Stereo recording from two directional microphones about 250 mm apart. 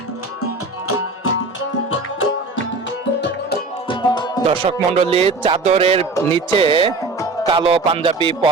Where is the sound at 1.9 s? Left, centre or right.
Left.